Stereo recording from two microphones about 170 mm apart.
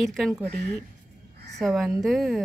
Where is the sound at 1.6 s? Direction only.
Centre (ahead or behind).